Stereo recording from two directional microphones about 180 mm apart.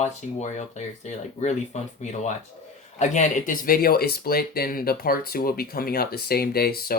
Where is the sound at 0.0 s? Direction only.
40° left (ahead or behind).